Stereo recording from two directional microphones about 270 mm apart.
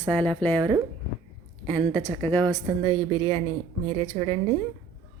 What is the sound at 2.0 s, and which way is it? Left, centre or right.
Speech, centre.